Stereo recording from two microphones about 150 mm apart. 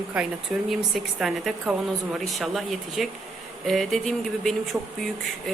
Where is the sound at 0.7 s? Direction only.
Centre (ahead or behind).